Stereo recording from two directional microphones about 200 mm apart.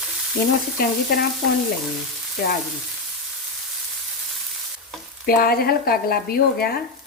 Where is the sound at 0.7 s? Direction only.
50° left (ahead or behind).